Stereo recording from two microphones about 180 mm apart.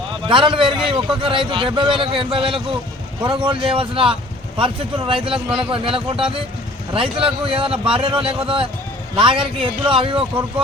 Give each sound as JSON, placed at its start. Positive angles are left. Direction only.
{"t": 0.3, "sound": "a man's voice", "side_deg": -30}